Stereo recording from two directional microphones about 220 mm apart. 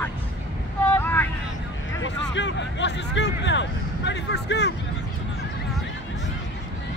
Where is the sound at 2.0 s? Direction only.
55° left (ahead or behind).